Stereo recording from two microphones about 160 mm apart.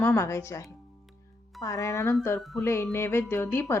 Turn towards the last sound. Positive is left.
turn(degrees=15)  # may be behind; listen again after turning